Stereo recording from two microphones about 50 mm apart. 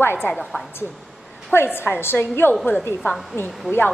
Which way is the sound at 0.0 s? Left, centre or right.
Left.